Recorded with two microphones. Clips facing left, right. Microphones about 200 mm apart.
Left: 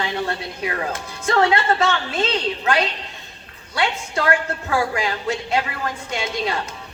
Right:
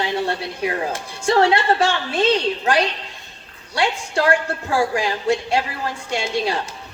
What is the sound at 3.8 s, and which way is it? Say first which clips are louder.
A woman's voice: right 2 dB; 30° right (ahead or behind).